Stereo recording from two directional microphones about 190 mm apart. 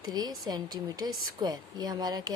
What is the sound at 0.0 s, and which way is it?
Speech, 20° right (ahead or behind).